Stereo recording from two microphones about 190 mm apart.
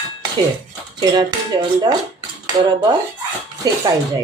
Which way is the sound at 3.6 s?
20° right (ahead or behind).